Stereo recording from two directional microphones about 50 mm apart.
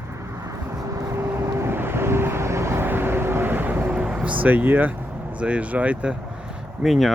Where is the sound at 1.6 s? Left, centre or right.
Right.